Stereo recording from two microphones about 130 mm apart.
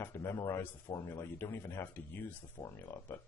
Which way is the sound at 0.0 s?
20° left (ahead or behind).